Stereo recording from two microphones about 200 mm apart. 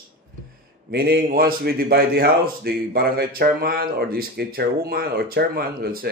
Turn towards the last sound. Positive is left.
turn(degrees=-45)  # may be behind; listen again after turning